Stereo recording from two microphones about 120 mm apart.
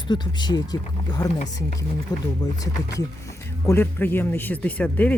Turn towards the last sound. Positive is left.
turn(degrees=10)  # may be behind; listen again after turning